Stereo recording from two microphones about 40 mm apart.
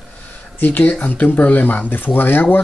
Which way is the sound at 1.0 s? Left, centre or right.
Left.